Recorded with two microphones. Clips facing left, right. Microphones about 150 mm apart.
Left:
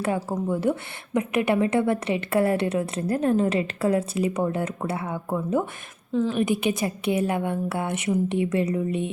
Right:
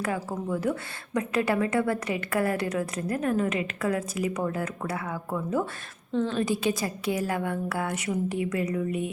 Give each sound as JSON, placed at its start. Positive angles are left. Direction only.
{"t": 0.0, "sound": "a woman's voice", "side_deg": 25}